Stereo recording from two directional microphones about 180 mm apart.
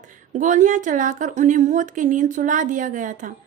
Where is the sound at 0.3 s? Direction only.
45° right (ahead or behind).